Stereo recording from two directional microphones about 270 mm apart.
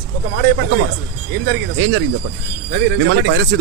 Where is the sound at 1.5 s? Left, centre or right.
Right.